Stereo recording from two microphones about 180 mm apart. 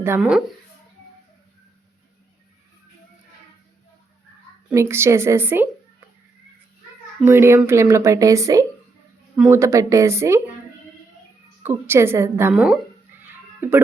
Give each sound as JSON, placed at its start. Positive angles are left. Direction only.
{"t": 0.2, "sound": "speech", "side_deg": 0}
{"t": 4.7, "sound": "speech", "side_deg": -15}
{"t": 7.3, "sound": "speech", "side_deg": -15}
{"t": 11.6, "sound": "speech", "side_deg": -15}